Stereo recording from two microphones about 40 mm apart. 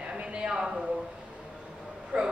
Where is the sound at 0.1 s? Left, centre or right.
Right.